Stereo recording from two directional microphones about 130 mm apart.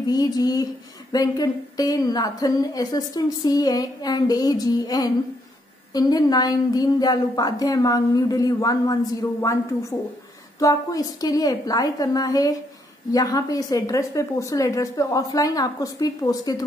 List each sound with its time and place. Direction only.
0.0 s a woman's voice: 30° left (ahead or behind)